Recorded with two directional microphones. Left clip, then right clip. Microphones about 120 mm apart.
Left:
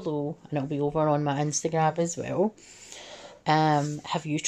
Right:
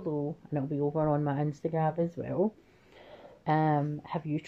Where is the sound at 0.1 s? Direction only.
30° left (ahead or behind).